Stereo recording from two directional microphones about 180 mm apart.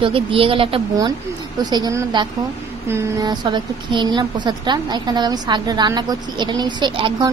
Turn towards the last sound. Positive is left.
turn(degrees=-25)  # may be behind; listen again after turning